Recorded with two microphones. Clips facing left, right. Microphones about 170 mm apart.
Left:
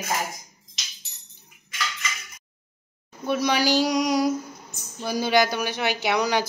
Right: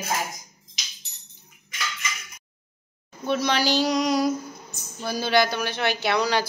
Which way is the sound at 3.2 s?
10° left (ahead or behind).